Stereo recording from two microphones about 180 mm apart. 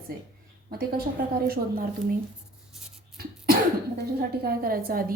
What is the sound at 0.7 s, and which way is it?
Speech, 55° right (ahead or behind).